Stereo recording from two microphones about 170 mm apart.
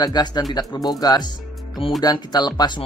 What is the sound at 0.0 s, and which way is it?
Speech, 25° left (ahead or behind).